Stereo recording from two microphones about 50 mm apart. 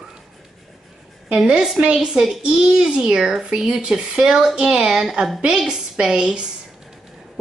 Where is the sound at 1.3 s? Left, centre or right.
Centre.